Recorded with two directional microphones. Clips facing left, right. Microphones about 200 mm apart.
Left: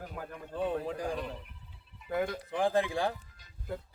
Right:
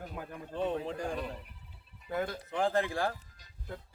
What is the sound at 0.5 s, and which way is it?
Speech, 5° left (ahead or behind).